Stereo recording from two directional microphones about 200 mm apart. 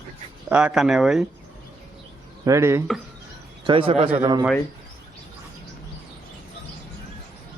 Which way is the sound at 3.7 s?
25° right (ahead or behind).